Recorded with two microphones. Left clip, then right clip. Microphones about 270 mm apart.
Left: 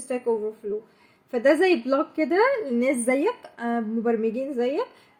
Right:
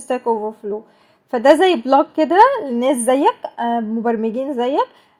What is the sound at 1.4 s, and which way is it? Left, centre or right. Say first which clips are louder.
A woman's voice: right 7 dB; right.